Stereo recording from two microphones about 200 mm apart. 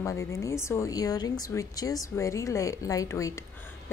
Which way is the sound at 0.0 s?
15° left (ahead or behind).